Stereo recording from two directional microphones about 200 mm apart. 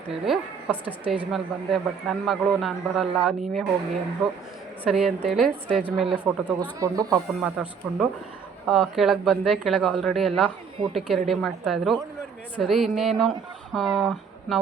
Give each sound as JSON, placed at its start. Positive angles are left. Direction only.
{"t": 0.1, "sound": "a woman's voice", "side_deg": -5}
{"t": 4.8, "sound": "a woman's voice", "side_deg": 0}
{"t": 6.7, "sound": "speech", "side_deg": -15}
{"t": 7.1, "sound": "a woman's voice", "side_deg": 0}